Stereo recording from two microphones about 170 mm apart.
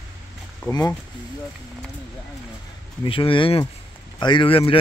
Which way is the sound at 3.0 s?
30° left (ahead or behind).